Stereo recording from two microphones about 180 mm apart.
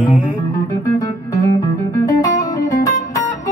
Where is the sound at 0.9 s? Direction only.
20° left (ahead or behind).